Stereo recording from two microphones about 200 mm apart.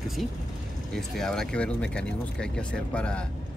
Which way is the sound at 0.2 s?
Centre (ahead or behind).